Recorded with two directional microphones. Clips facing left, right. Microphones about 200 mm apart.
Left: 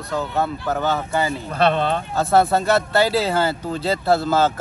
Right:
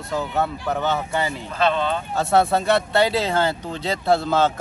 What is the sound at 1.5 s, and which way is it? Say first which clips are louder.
Speech: left 2 dB; 60° left (ahead or behind).